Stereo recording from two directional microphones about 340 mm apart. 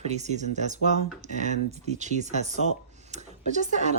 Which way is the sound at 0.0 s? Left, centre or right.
Centre.